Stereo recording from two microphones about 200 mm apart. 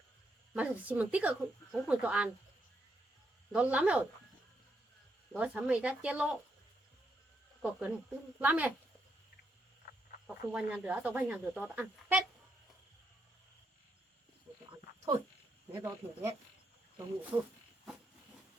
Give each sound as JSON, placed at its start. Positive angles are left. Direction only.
{"t": 0.5, "sound": "speech", "side_deg": -5}
{"t": 3.5, "sound": "speech", "side_deg": -5}
{"t": 5.3, "sound": "speech", "side_deg": -5}
{"t": 7.6, "sound": "speech", "side_deg": -10}
{"t": 10.5, "sound": "speech", "side_deg": -5}
{"t": 15.7, "sound": "speech", "side_deg": -15}
{"t": 17.3, "sound": "speech", "side_deg": -25}